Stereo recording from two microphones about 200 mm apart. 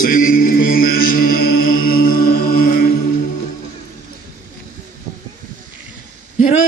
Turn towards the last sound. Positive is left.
turn(degrees=40)  # may be behind; listen again after turning